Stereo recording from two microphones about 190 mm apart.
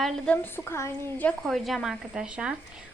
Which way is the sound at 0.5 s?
10° left (ahead or behind).